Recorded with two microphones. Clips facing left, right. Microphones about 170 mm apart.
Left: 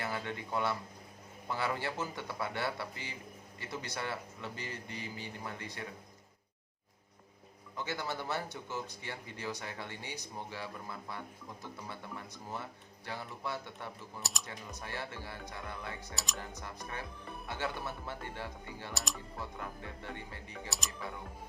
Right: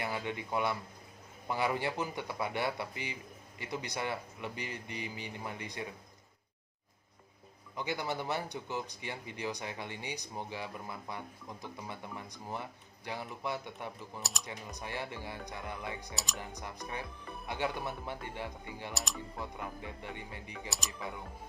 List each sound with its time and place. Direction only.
0.0 s speech: 15° right (ahead or behind)
7.8 s speech: 15° right (ahead or behind)
14.2 s speech: centre (ahead or behind)
14.4 s speech: 15° right (ahead or behind)
16.1 s speech: centre (ahead or behind)
16.6 s speech: 15° right (ahead or behind)
18.9 s speech: centre (ahead or behind)
19.4 s speech: 15° right (ahead or behind)
20.7 s speech: centre (ahead or behind)